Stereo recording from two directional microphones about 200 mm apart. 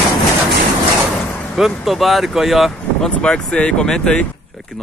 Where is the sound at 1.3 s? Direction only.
5° left (ahead or behind).